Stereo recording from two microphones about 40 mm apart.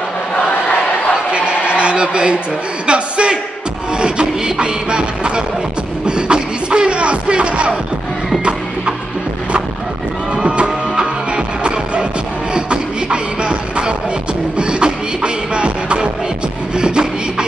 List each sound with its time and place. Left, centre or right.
1.3 s a sound: right
4.0 s music: right
6.0 s beatboxing: right
10.3 s music: right
12.5 s beatboxing: right
14.6 s music: right
16.7 s beatboxing: right